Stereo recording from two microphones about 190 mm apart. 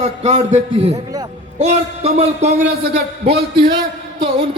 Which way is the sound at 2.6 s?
55° right (ahead or behind).